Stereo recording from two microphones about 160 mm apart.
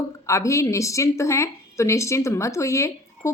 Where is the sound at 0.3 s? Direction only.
20° left (ahead or behind).